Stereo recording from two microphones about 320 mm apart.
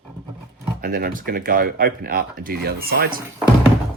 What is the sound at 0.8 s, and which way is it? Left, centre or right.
Speech, right.